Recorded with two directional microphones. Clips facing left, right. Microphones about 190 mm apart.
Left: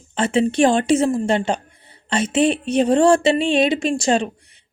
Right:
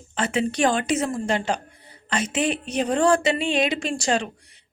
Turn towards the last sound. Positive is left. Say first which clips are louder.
# left 5 dB
turn(degrees=25)  # may be behind; listen again after turning